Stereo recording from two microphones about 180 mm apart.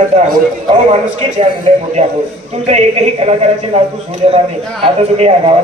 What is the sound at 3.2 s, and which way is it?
Speech, 40° right (ahead or behind).